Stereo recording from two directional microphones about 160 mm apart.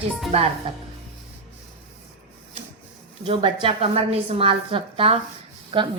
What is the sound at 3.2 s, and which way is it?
A woman's voice, 30° right (ahead or behind).